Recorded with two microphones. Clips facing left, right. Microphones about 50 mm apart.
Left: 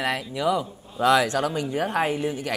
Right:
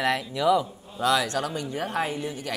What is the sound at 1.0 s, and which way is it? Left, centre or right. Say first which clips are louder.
Speech: left 4 dB; left.